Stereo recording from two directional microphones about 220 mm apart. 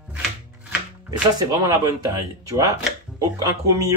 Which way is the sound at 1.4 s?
15° right (ahead or behind).